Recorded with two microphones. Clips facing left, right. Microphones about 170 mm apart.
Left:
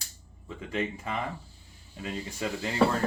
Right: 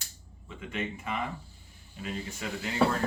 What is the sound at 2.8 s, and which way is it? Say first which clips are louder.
Speech: left 2 dB; centre (ahead or behind).